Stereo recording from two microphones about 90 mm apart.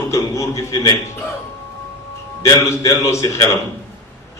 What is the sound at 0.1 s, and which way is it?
Speech, 35° left (ahead or behind).